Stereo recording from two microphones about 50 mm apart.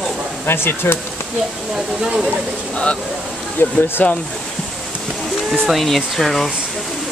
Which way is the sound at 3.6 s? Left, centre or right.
Left.